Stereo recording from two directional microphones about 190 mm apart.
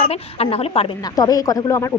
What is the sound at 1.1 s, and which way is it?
Speech, 20° left (ahead or behind).